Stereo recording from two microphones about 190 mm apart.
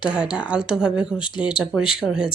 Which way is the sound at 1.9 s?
Centre (ahead or behind).